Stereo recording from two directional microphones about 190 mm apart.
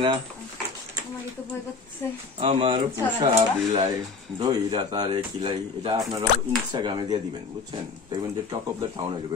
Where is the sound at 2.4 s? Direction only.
30° right (ahead or behind).